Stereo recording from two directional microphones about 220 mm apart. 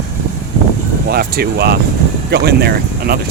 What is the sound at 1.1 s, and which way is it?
Speech, 45° right (ahead or behind).